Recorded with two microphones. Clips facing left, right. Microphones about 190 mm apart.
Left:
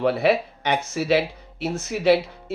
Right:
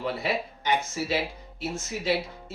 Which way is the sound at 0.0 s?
70° left (ahead or behind).